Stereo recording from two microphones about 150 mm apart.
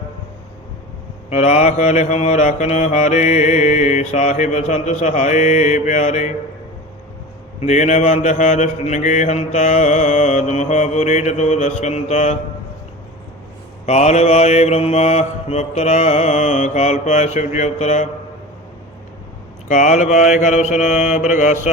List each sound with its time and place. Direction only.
1.3 s mantra: 50° left (ahead or behind)
7.6 s mantra: 50° left (ahead or behind)
13.8 s mantra: 50° left (ahead or behind)
19.6 s mantra: 55° left (ahead or behind)